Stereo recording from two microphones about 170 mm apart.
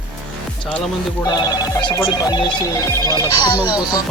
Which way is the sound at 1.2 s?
25° left (ahead or behind).